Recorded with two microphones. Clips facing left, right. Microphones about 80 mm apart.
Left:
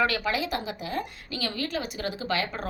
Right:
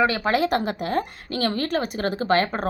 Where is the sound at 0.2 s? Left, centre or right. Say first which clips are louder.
Right 7 dB; right.